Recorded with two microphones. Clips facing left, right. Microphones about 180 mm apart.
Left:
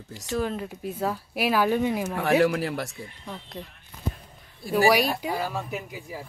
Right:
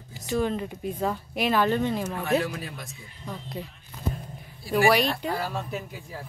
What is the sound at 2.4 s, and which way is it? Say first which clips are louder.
Speech: left 10 dB; 75° left (ahead or behind).